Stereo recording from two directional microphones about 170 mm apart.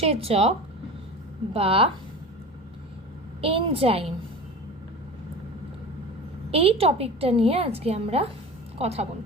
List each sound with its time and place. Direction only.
0.0 s a woman's voice: 35° right (ahead or behind)
1.5 s a woman's voice: 35° right (ahead or behind)
3.4 s a woman's voice: 35° right (ahead or behind)
6.5 s a woman's voice: 35° right (ahead or behind)